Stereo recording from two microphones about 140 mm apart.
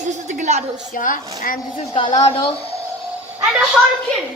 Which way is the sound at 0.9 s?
75° left (ahead or behind).